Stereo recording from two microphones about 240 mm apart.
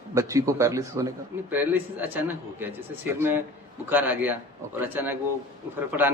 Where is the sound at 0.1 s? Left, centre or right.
Centre.